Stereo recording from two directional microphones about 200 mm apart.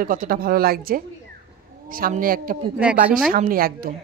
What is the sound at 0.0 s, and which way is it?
A woman's voice, 45° right (ahead or behind).